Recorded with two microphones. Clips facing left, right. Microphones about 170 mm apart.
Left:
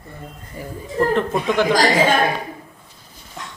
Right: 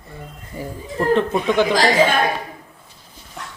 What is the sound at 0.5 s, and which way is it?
Speech, 25° right (ahead or behind).